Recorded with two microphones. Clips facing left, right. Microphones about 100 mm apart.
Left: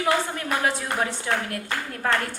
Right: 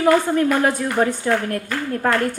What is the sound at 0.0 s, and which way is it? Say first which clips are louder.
Speech: right 8 dB; 45° right (ahead or behind).